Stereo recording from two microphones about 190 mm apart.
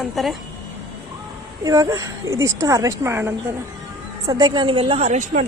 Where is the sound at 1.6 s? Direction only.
20° right (ahead or behind).